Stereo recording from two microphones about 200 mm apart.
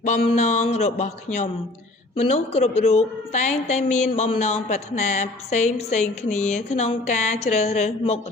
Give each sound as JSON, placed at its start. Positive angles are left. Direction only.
{"t": 0.0, "sound": "a woman's voice", "side_deg": 35}